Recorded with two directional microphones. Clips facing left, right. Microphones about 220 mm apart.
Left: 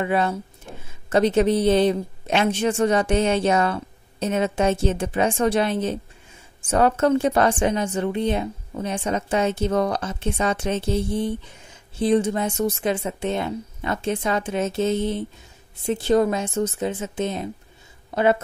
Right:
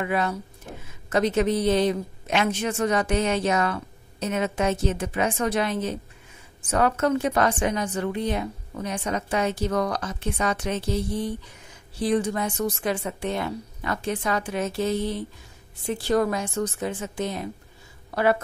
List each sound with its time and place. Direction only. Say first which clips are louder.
0.0 s a woman's voice: left 3 dB; 25° left (ahead or behind)